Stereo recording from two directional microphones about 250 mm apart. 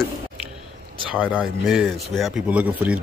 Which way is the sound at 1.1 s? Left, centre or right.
Centre.